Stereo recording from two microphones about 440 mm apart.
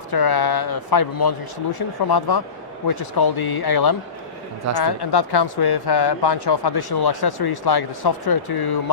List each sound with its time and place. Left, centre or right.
0.1 s speech: left